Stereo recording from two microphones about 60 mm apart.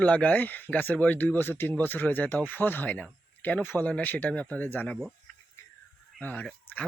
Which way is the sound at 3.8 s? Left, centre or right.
Left.